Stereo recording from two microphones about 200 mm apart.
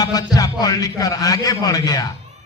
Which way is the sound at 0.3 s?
20° left (ahead or behind).